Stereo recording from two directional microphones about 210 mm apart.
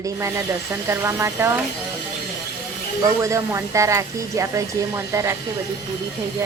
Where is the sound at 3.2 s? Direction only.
15° right (ahead or behind).